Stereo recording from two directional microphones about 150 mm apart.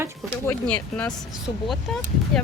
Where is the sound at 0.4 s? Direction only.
10° left (ahead or behind).